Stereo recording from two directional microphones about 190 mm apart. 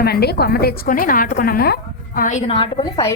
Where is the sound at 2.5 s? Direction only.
25° left (ahead or behind).